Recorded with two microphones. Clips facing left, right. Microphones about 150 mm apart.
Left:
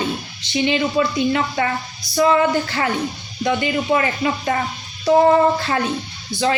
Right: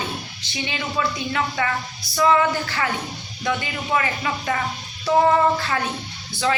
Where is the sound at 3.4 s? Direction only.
30° left (ahead or behind).